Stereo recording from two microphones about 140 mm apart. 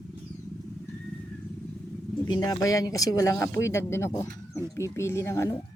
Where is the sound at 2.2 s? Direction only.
30° left (ahead or behind).